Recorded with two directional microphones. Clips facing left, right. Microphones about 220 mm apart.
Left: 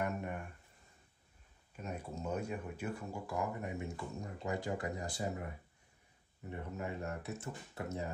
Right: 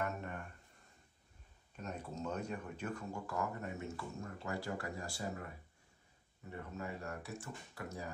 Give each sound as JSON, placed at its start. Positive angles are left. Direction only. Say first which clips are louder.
{"t": 0.0, "sound": "a sound", "louder": "left 3 dB", "side_deg": 15}
{"t": 1.8, "sound": "speech", "louder": "left 1 dB", "side_deg": 10}
{"t": 6.5, "sound": "speech", "louder": "left 3 dB", "side_deg": 20}